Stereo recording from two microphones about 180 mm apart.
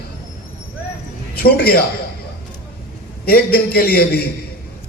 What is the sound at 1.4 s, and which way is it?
Speech, 60° left (ahead or behind).